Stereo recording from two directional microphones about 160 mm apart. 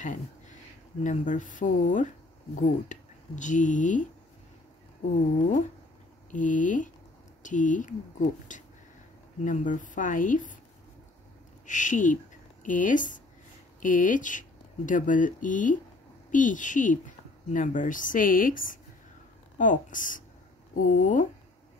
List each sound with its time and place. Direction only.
0.0 s a sound: 50° left (ahead or behind)
1.0 s speech: 50° left (ahead or behind)
6.3 s speech: 55° left (ahead or behind)
11.6 s speech: 50° left (ahead or behind)